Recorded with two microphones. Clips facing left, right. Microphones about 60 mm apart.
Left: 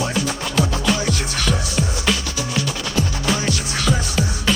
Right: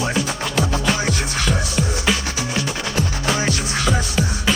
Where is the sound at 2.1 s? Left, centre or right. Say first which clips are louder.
Right 1 dB; centre.